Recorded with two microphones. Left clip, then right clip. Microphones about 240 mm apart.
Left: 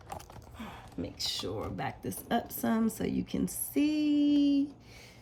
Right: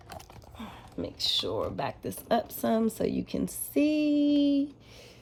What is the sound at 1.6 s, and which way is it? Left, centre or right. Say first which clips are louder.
Speech: right 5 dB; centre.